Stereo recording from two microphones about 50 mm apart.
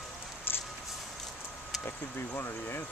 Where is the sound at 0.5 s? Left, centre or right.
Left.